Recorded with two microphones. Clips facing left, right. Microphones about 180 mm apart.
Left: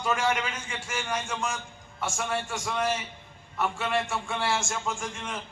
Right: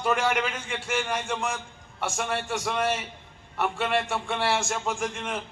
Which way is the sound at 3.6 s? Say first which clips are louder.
Right 2 dB; 60° right (ahead or behind).